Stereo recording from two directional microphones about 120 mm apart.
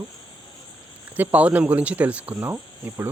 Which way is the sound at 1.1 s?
15° right (ahead or behind).